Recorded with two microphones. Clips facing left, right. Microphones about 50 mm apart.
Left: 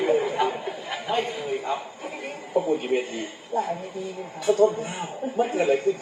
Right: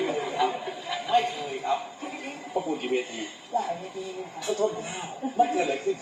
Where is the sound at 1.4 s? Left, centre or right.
Centre.